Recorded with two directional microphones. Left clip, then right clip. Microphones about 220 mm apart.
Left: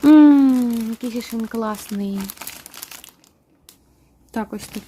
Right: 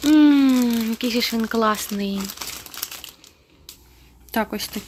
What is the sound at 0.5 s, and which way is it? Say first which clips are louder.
Speech: right 1 dB; 5° left (ahead or behind).